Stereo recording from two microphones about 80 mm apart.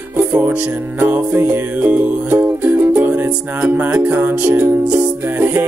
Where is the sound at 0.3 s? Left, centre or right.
Centre.